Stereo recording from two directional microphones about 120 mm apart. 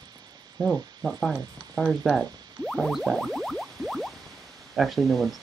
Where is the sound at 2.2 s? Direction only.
35° right (ahead or behind).